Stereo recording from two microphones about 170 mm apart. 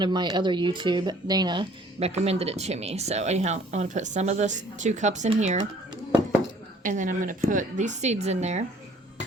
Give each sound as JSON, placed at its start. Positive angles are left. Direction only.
{"t": 0.0, "sound": "speech", "side_deg": -25}
{"t": 2.0, "sound": "speech", "side_deg": -40}
{"t": 6.8, "sound": "a woman's voice", "side_deg": -50}